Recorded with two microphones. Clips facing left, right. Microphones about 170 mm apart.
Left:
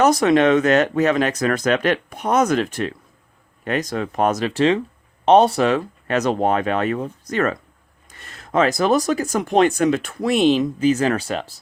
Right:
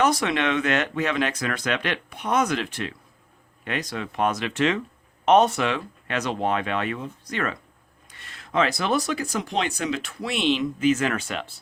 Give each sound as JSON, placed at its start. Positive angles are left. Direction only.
{"t": 0.0, "sound": "speech", "side_deg": 40}